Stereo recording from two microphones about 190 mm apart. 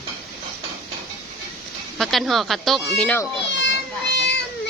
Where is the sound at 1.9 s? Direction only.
Centre (ahead or behind).